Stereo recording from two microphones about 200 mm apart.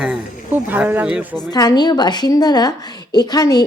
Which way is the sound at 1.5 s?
20° left (ahead or behind).